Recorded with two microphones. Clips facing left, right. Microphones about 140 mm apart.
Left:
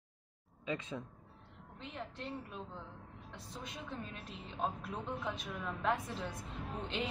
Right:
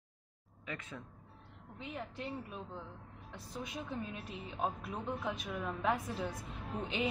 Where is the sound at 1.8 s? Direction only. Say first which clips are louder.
Right 2 dB; 5° right (ahead or behind).